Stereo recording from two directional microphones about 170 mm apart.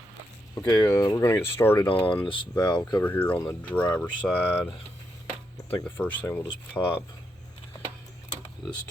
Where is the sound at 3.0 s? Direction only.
10° left (ahead or behind).